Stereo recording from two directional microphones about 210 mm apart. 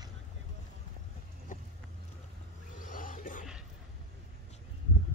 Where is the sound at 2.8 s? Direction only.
40° left (ahead or behind).